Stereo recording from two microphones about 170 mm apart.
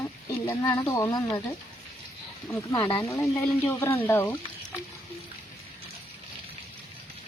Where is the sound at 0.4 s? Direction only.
20° left (ahead or behind).